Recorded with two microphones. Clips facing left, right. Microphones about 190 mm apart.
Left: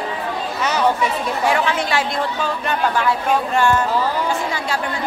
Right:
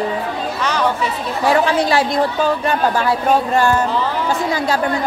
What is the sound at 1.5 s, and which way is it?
Speech, 35° right (ahead or behind).